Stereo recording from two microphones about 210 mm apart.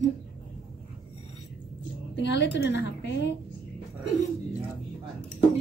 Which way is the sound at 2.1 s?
60° left (ahead or behind).